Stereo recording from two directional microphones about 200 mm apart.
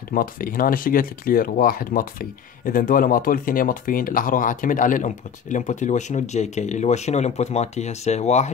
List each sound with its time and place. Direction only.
0.1 s speech: 45° left (ahead or behind)